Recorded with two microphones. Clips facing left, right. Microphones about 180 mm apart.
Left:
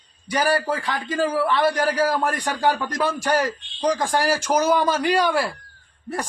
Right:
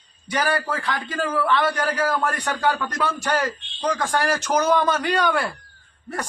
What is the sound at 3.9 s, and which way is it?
Speech, 35° left (ahead or behind).